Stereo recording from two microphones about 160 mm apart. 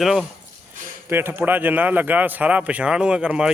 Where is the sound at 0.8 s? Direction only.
55° right (ahead or behind).